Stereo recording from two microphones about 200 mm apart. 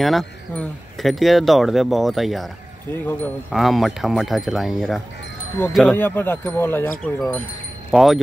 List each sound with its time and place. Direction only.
0.0 s speech: centre (ahead or behind)
5.9 s speech: 10° left (ahead or behind)